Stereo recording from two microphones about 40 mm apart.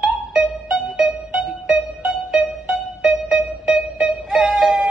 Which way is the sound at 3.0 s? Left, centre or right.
Centre.